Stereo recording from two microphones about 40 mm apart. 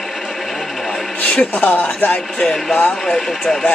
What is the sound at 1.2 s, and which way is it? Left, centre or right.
Speech, left.